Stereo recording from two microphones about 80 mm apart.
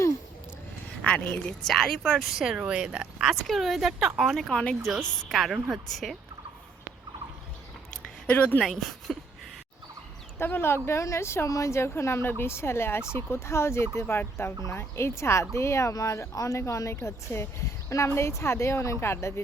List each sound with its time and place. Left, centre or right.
1.0 s a woman's voice: centre
1.6 s speech: centre
4.5 s a woman's voice: centre
5.3 s speech: centre
8.3 s speech: centre
8.6 s speech: centre
10.3 s speech: left